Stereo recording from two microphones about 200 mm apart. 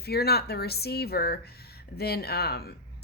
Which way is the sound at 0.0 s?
50° left (ahead or behind).